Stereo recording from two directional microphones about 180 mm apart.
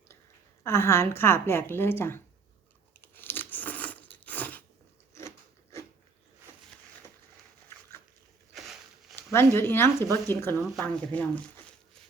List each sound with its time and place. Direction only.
0.6 s a woman's voice: 15° left (ahead or behind)
3.0 s crunch: 10° left (ahead or behind)
8.5 s a sound: centre (ahead or behind)
9.1 s a woman's voice: 10° left (ahead or behind)